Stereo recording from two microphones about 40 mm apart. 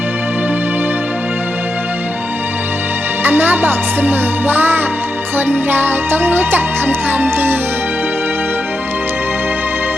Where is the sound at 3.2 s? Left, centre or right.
Right.